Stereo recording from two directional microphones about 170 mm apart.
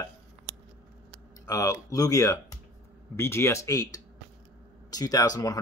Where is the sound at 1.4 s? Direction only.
20° left (ahead or behind).